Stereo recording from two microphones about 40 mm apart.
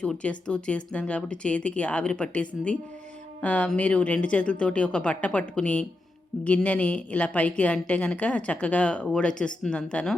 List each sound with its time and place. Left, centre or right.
0.2 s a woman's voice: left